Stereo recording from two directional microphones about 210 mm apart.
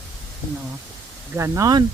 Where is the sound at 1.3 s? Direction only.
15° right (ahead or behind).